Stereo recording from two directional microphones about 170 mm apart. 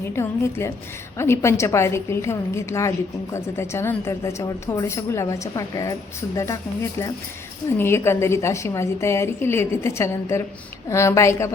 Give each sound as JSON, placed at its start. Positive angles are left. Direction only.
{"t": 0.1, "sound": "a woman's voice", "side_deg": 15}
{"t": 7.7, "sound": "a woman's voice", "side_deg": 15}